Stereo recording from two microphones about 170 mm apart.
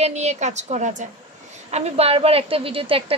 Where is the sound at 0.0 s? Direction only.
40° right (ahead or behind).